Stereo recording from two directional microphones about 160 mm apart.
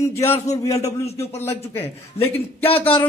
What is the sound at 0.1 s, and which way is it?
A man's voice, 15° left (ahead or behind).